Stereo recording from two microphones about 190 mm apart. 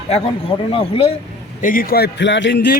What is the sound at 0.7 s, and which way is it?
Speech, 30° left (ahead or behind).